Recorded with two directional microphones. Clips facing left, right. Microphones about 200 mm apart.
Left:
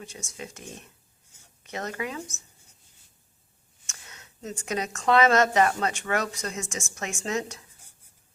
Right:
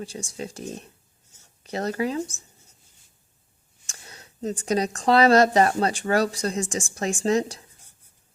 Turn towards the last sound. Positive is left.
turn(degrees=-35)  # may be behind; listen again after turning